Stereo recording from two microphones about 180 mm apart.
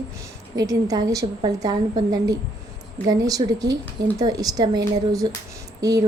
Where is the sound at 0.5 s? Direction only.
20° right (ahead or behind).